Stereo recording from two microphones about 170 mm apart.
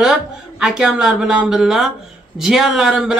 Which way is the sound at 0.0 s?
5° right (ahead or behind).